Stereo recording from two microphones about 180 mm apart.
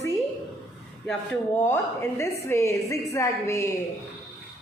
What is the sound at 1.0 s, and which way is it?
A woman's voice, 10° left (ahead or behind).